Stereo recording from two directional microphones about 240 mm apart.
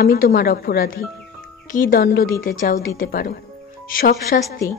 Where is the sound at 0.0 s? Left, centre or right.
Left.